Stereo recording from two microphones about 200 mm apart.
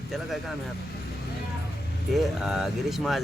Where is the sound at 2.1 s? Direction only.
Centre (ahead or behind).